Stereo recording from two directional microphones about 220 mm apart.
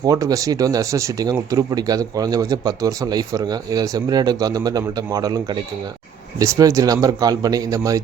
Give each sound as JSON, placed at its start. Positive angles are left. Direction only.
{"t": 0.0, "sound": "speech", "side_deg": -15}